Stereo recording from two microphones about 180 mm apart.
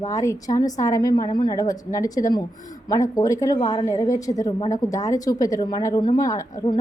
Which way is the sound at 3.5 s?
35° left (ahead or behind).